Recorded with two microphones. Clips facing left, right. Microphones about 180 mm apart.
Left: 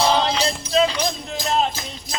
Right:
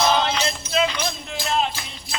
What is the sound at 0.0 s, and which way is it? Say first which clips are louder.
Music: left 1 dB; 35° left (ahead or behind).